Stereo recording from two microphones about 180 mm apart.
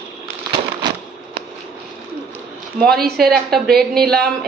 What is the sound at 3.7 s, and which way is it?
Speech, 60° right (ahead or behind).